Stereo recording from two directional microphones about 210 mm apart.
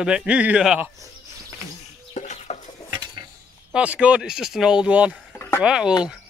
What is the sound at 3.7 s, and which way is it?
A man's voice, 5° right (ahead or behind).